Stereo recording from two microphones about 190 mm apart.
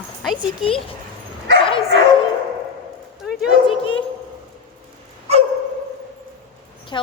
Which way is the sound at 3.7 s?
30° left (ahead or behind).